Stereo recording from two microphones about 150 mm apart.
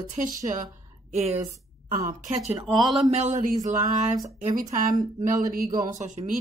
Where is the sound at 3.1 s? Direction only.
50° right (ahead or behind); by 4.9 s 65° right (ahead or behind).